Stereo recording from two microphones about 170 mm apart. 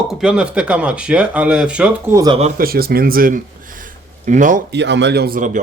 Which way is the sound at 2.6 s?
60° right (ahead or behind).